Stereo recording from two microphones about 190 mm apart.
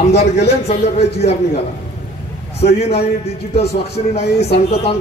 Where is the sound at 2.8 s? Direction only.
35° left (ahead or behind).